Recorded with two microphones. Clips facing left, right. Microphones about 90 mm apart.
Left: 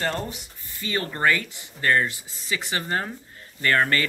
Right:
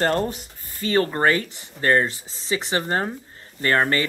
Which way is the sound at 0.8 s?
35° right (ahead or behind).